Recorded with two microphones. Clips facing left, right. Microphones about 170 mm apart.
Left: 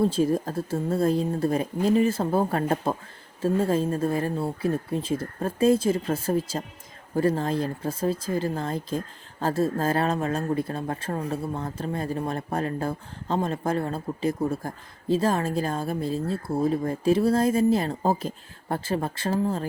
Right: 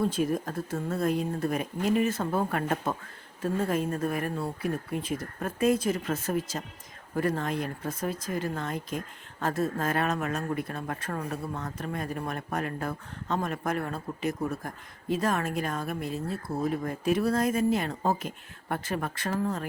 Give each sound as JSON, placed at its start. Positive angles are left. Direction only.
{"t": 0.0, "sound": "speech", "side_deg": 30}